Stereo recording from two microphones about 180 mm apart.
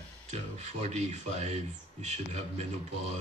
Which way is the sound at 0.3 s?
35° right (ahead or behind).